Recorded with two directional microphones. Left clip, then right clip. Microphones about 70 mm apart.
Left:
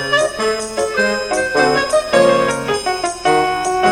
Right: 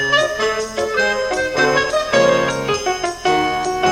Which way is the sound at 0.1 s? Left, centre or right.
Right.